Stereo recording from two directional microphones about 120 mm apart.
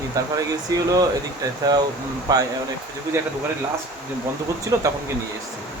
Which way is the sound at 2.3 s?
30° right (ahead or behind).